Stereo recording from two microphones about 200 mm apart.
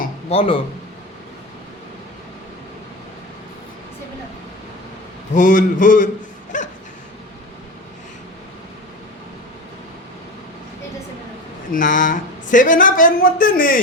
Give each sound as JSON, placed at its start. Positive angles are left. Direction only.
{"t": 0.3, "sound": "speech", "side_deg": 30}
{"t": 5.3, "sound": "speech", "side_deg": 40}
{"t": 6.5, "sound": "bow-wow", "side_deg": 40}
{"t": 11.7, "sound": "speech", "side_deg": 40}